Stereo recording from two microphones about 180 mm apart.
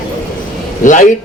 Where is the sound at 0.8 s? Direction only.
45° left (ahead or behind).